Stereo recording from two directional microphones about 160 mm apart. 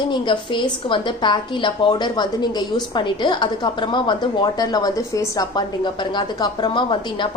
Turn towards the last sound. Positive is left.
turn(degrees=30)  # may be behind; listen again after turning